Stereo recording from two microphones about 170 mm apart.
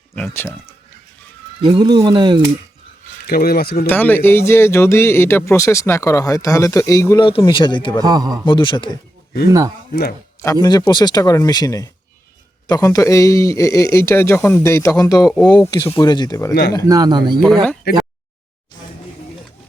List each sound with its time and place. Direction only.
0.2 s speech: 15° left (ahead or behind)
1.6 s speech: 25° right (ahead or behind)
3.2 s speech: 60° left (ahead or behind)
3.8 s speech: 10° left (ahead or behind)
7.3 s speech: 30° left (ahead or behind)
8.0 s speech: 25° right (ahead or behind)
8.4 s speech: 30° left (ahead or behind)
9.5 s speech: 20° right (ahead or behind)
9.9 s speech: 65° left (ahead or behind)
10.4 s speech: 20° left (ahead or behind)
15.3 s speech: 5° left (ahead or behind)
15.5 s speech: 25° left (ahead or behind)
16.8 s speech: 20° right (ahead or behind)
17.9 s a sound: 70° left (ahead or behind)